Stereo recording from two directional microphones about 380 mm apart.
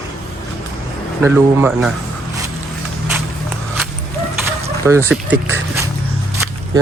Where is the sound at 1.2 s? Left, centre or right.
Centre.